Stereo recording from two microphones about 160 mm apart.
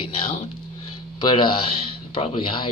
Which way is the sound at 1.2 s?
30° left (ahead or behind).